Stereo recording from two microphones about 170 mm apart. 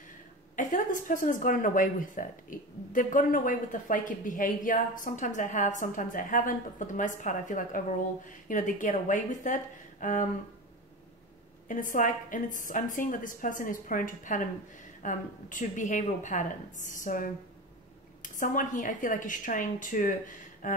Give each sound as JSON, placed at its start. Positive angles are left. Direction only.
{"t": 0.6, "sound": "a woman's voice", "side_deg": 50}
{"t": 11.6, "sound": "a woman's voice", "side_deg": 50}